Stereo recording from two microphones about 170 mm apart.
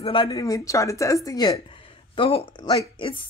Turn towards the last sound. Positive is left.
turn(degrees=30)  # may be behind; listen again after turning